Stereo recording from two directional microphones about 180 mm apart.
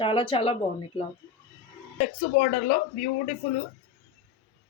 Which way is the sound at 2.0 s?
50° left (ahead or behind).